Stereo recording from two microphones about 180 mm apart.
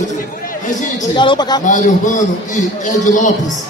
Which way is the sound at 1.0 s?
25° left (ahead or behind).